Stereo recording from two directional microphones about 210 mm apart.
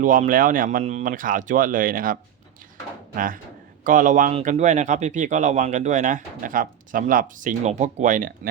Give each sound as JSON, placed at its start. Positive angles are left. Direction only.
{"t": 0.0, "sound": "speech", "side_deg": -40}
{"t": 3.8, "sound": "speech", "side_deg": -35}